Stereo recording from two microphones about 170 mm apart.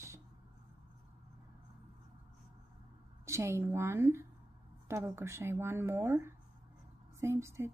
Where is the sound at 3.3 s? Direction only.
15° right (ahead or behind).